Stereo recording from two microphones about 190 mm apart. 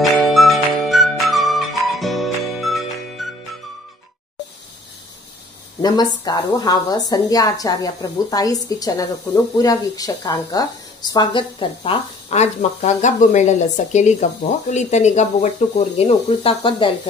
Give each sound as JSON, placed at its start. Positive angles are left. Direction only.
{"t": 0.2, "sound": "music", "side_deg": 0}
{"t": 5.8, "sound": "a woman's voice", "side_deg": 20}